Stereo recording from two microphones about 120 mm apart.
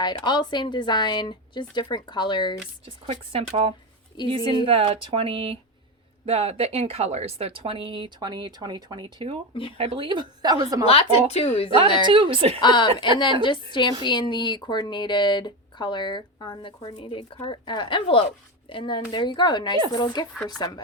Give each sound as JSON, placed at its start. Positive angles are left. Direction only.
{"t": 0.0, "sound": "speech", "side_deg": 40}
{"t": 3.3, "sound": "speech", "side_deg": -50}
{"t": 4.2, "sound": "speech", "side_deg": 40}
{"t": 4.6, "sound": "speech", "side_deg": -50}
{"t": 9.7, "sound": "a woman's voice", "side_deg": -55}
{"t": 10.8, "sound": "a woman's voice", "side_deg": 55}
{"t": 12.0, "sound": "speech", "side_deg": -45}
{"t": 12.5, "sound": "a woman's voice", "side_deg": 40}